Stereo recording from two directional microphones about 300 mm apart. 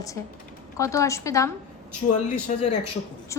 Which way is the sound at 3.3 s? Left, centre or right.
Centre.